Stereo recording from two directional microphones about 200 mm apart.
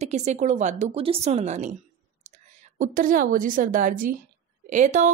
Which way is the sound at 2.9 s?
45° right (ahead or behind).